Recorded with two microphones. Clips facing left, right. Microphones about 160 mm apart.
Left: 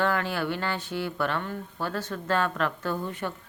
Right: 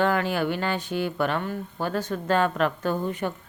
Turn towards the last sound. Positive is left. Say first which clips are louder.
# right 4 dB
turn(degrees=-15)  # may be behind; listen again after turning